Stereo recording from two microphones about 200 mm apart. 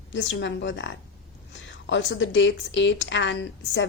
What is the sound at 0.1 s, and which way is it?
Speech, 65° left (ahead or behind).